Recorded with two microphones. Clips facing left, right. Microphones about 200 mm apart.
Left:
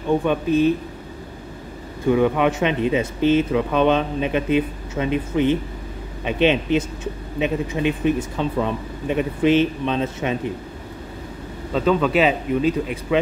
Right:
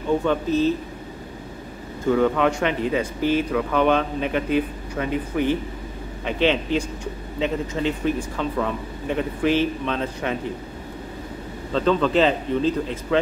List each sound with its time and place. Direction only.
0.2 s speech: 15° left (ahead or behind)
2.0 s speech: 15° left (ahead or behind)
11.7 s speech: 10° left (ahead or behind)